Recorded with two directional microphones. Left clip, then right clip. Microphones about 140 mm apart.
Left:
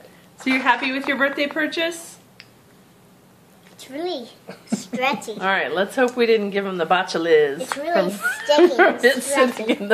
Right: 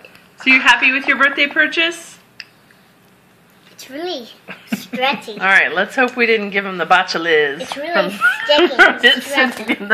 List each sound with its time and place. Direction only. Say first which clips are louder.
0.4 s speech: right 8 dB; 5° right (ahead or behind)
3.9 s a child's voice: right 2 dB; 15° right (ahead or behind)
4.9 s speech: right 4 dB; 5° left (ahead or behind)
7.9 s a child's voice: right 6 dB; 25° left (ahead or behind)